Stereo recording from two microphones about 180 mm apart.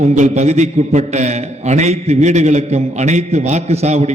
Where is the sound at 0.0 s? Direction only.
40° right (ahead or behind).